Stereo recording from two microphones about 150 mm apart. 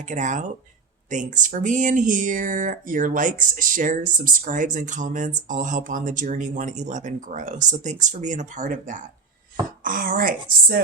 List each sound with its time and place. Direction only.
0.1 s speech: 55° right (ahead or behind)
9.8 s a woman's voice: 70° right (ahead or behind)